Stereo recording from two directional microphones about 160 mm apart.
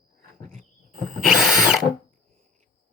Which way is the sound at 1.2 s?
Centre (ahead or behind).